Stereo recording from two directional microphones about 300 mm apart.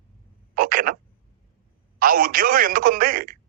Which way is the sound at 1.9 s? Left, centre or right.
Right.